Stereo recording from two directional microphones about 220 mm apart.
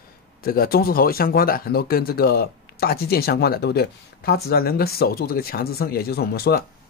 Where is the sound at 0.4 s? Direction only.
45° left (ahead or behind).